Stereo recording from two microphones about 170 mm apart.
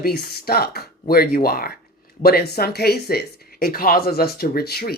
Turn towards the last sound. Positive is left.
turn(degrees=65)  # may be behind; listen again after turning